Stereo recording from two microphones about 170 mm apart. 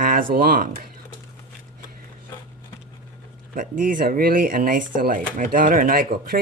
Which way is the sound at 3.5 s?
50° right (ahead or behind).